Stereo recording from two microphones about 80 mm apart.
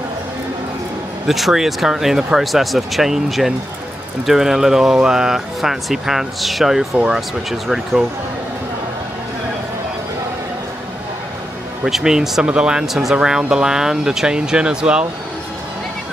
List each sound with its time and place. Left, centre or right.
1.2 s speech: centre
11.8 s speech: centre